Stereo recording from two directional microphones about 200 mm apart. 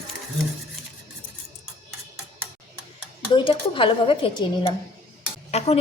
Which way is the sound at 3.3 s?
25° left (ahead or behind).